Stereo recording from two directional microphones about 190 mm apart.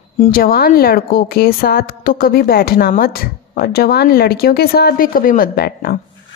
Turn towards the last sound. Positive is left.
turn(degrees=55)  # may be behind; listen again after turning